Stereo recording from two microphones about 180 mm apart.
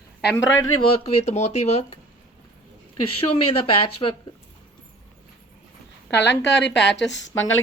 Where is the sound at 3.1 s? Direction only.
30° left (ahead or behind).